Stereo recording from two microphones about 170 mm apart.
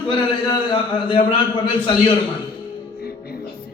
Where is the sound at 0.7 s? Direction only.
30° left (ahead or behind).